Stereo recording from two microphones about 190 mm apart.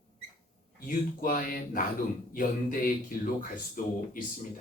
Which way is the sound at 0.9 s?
45° left (ahead or behind).